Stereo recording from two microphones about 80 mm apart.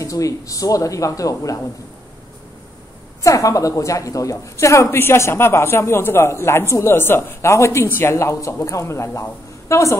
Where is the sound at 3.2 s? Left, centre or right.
Left.